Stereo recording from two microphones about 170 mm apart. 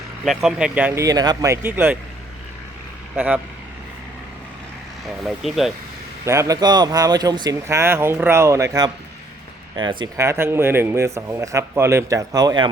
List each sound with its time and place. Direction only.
0.3 s a man's voice: 5° right (ahead or behind)
3.2 s a man's voice: 10° right (ahead or behind)
5.2 s speech: centre (ahead or behind)
6.2 s speech: 15° right (ahead or behind)
10.2 s a man's voice: 15° right (ahead or behind)